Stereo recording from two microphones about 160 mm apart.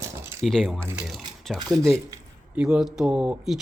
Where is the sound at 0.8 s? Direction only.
15° right (ahead or behind).